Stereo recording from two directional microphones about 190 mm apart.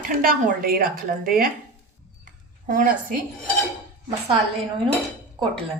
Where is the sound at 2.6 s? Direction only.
40° right (ahead or behind).